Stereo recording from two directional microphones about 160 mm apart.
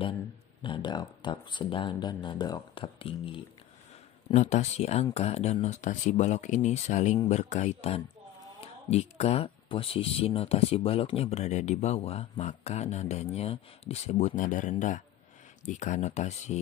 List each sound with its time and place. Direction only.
0.6 s speech: 30° left (ahead or behind)
4.3 s speech: 45° left (ahead or behind)